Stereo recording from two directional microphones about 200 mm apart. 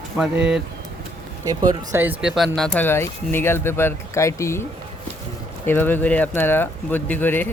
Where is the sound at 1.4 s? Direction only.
20° right (ahead or behind); by 4.6 s 15° left (ahead or behind).